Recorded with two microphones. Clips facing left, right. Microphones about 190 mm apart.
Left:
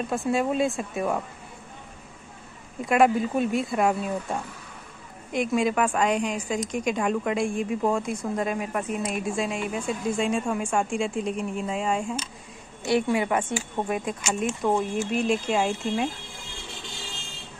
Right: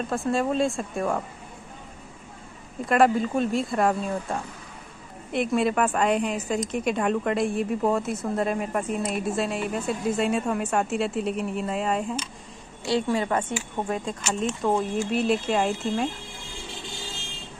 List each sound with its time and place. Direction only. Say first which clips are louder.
0.1 s a woman's voice: even; centre (ahead or behind)
2.8 s a woman's voice: even; centre (ahead or behind)
12.9 s speech: left 1 dB; 15° left (ahead or behind)
14.6 s a woman's voice: right 1 dB; centre (ahead or behind)